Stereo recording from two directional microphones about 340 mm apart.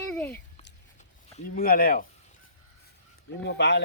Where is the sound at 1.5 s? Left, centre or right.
Left.